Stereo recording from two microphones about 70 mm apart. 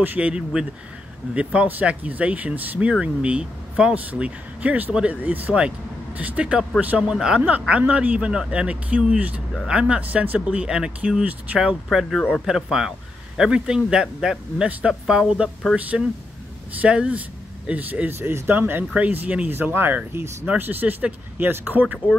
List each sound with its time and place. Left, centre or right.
0.0 s speech: right
0.3 s speech: centre
7.1 s speech: centre; by 10.4 s right
10.4 s speech: centre
16.8 s speech: centre